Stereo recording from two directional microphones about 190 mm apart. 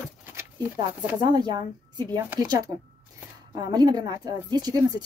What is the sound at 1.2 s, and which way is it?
Speech, 20° right (ahead or behind).